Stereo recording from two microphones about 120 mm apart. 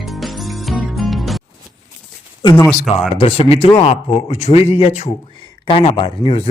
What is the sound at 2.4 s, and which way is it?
Speech, 35° left (ahead or behind).